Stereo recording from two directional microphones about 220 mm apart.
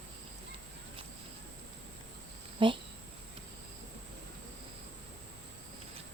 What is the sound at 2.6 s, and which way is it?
Speech, 20° right (ahead or behind).